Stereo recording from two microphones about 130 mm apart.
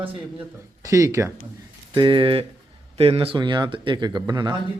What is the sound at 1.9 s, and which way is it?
Speech, 35° right (ahead or behind).